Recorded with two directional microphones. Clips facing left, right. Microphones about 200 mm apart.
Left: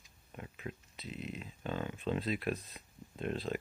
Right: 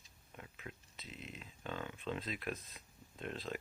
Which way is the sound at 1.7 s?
35° left (ahead or behind).